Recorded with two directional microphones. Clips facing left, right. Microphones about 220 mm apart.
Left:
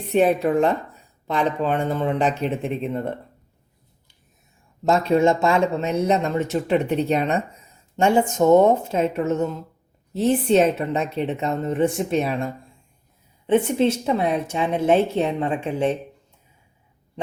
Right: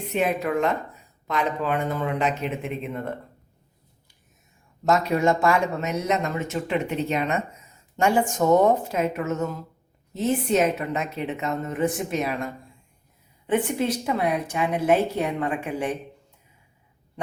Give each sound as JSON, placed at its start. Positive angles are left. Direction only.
{"t": 0.1, "sound": "a woman's voice", "side_deg": 35}
{"t": 4.9, "sound": "a woman's voice", "side_deg": 30}